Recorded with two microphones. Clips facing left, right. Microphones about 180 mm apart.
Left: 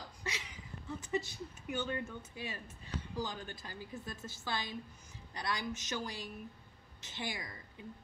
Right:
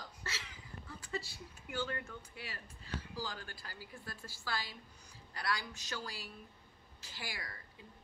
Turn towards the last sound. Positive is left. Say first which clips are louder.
# left 3 dB
turn(degrees=20)  # may be behind; listen again after turning